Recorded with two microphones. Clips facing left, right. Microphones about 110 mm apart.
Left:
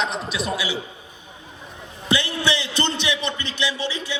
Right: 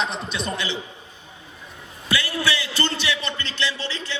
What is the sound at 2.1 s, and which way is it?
A man's voice, 20° left (ahead or behind).